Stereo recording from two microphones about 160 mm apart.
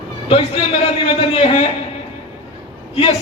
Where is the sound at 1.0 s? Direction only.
35° left (ahead or behind).